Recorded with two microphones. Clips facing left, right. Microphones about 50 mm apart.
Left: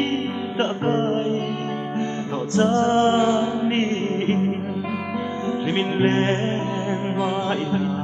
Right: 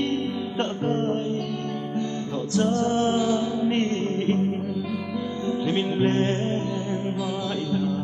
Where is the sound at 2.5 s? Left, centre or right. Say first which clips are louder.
Left 5 dB; left.